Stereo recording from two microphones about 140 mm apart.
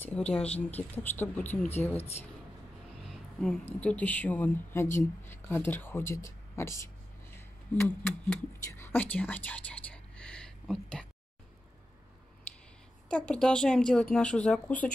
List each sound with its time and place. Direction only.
0.0 s speech: 10° left (ahead or behind)
3.1 s a sound: 5° left (ahead or behind)
3.8 s speech: 10° left (ahead or behind)
13.1 s a woman's voice: 10° left (ahead or behind)